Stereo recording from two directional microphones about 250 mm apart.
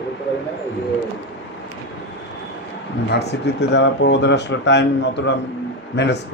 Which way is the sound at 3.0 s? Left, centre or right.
Left.